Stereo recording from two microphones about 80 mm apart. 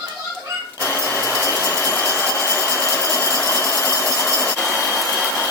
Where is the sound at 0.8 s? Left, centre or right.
Left.